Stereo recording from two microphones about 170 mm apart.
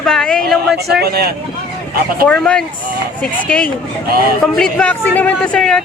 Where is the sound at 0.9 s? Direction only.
70° right (ahead or behind).